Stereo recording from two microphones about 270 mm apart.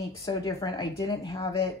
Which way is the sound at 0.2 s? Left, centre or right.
Centre.